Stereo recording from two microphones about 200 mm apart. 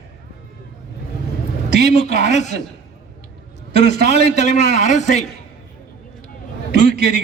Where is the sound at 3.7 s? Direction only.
50° right (ahead or behind).